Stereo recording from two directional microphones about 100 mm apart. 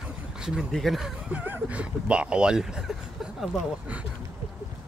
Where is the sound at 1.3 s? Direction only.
15° right (ahead or behind).